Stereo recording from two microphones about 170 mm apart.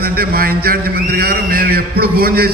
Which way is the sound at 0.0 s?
65° right (ahead or behind).